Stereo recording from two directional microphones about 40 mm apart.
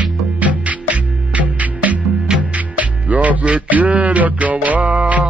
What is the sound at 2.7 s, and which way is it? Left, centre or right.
Music, right.